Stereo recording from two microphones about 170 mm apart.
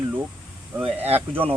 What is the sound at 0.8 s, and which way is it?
Speech, 35° right (ahead or behind).